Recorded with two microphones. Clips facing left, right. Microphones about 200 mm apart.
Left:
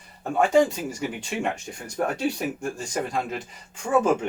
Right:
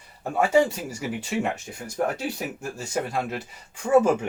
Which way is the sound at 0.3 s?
10° right (ahead or behind).